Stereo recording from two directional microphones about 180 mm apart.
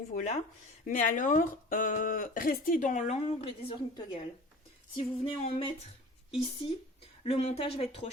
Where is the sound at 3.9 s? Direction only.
25° left (ahead or behind).